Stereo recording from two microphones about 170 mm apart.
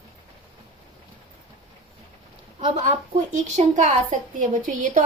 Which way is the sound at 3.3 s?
45° right (ahead or behind).